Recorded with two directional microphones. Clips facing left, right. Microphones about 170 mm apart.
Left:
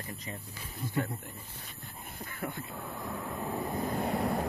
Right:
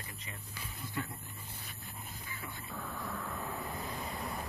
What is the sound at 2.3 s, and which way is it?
Speech, 55° left (ahead or behind).